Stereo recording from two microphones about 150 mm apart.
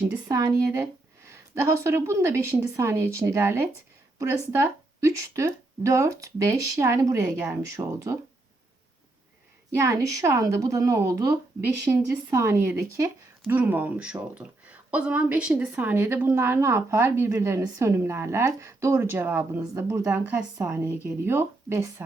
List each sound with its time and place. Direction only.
0.3 s a woman's voice: 20° right (ahead or behind)
9.7 s a woman's voice: 20° right (ahead or behind)